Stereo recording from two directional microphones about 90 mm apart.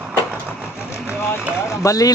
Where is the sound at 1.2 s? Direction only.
25° left (ahead or behind).